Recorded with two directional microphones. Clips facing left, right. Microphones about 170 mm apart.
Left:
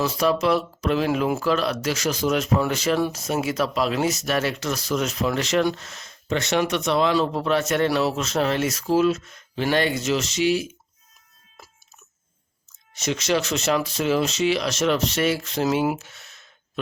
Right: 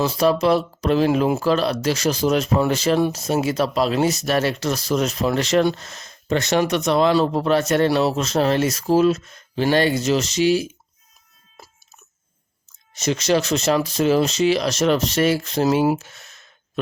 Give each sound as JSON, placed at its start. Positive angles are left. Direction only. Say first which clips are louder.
{"t": 0.0, "sound": "speech", "louder": "right 3 dB", "side_deg": -30}
{"t": 13.0, "sound": "speech", "louder": "right 4 dB", "side_deg": -35}